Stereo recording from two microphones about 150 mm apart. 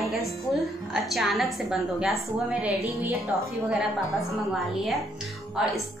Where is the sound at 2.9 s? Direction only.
15° right (ahead or behind).